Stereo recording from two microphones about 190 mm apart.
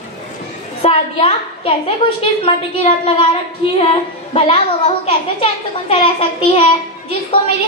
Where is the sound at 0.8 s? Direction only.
30° left (ahead or behind).